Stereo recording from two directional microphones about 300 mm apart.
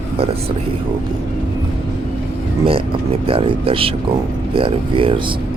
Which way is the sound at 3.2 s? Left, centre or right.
Centre.